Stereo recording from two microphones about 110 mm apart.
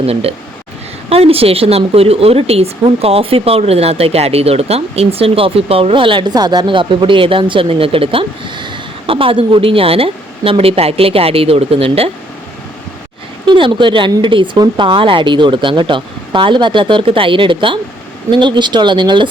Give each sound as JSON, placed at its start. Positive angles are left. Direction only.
{"t": 0.0, "sound": "speech", "side_deg": -65}
{"t": 13.4, "sound": "speech", "side_deg": -50}